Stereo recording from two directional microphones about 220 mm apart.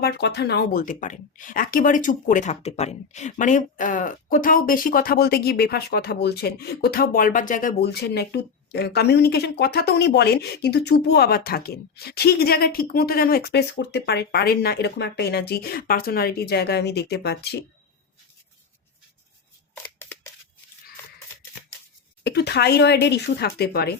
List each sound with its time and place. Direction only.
0.0 s speech: 50° left (ahead or behind)
19.7 s scissors: 10° left (ahead or behind)
22.2 s speech: 50° left (ahead or behind)